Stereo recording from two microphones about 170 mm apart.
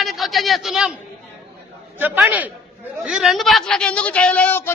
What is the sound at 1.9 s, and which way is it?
A man's voice, 10° right (ahead or behind).